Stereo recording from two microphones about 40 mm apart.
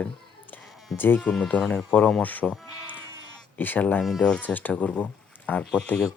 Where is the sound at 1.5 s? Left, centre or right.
Left.